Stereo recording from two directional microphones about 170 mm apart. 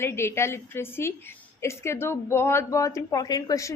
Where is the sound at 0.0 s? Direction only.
15° left (ahead or behind).